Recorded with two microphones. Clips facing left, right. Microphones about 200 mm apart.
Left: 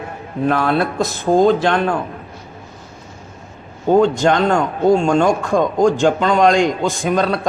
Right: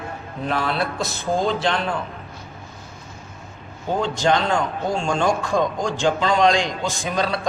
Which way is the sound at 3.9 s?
50° left (ahead or behind).